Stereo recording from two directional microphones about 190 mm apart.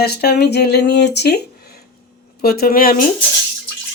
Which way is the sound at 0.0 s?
55° left (ahead or behind).